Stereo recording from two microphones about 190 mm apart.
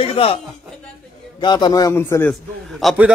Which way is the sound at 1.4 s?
25° left (ahead or behind).